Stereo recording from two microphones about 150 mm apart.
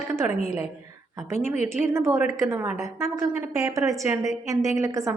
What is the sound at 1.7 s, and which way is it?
A woman's voice, 15° right (ahead or behind).